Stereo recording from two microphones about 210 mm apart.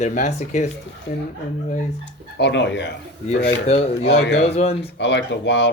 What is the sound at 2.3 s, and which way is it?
Speech, 55° left (ahead or behind).